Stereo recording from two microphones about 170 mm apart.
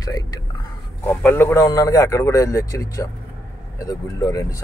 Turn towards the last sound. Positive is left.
turn(degrees=20)  # may be behind; listen again after turning